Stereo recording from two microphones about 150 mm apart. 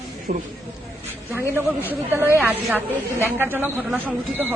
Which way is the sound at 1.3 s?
15° right (ahead or behind).